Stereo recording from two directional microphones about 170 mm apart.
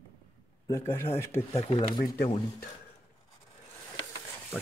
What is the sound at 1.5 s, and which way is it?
Speech, 35° left (ahead or behind).